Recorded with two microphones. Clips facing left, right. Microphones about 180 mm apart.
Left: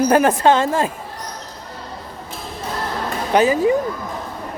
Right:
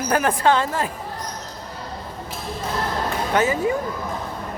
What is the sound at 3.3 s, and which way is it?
Speech, 20° left (ahead or behind).